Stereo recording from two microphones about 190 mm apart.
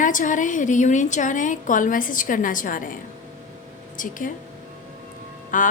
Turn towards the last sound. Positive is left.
turn(degrees=45)  # may be behind; listen again after turning